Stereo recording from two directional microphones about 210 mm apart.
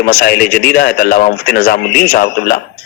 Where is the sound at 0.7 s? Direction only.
45° left (ahead or behind).